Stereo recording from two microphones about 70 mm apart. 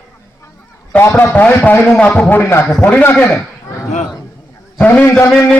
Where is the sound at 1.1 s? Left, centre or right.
Left.